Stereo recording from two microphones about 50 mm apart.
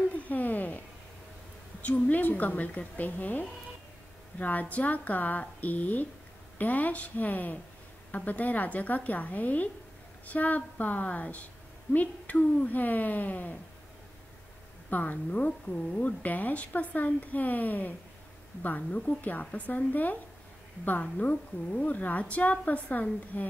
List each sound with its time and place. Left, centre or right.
0.1 s a sound: left
1.8 s speech: left
14.9 s a woman's voice: left